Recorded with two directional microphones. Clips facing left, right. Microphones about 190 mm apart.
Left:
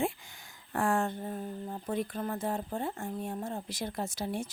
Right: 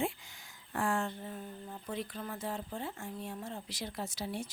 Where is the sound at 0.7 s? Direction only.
50° left (ahead or behind).